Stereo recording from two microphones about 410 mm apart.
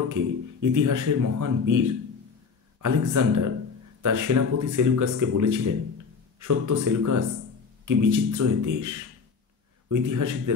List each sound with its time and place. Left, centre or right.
0.1 s speech: right